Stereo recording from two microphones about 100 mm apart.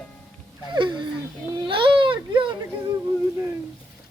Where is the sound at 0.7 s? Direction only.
50° right (ahead or behind).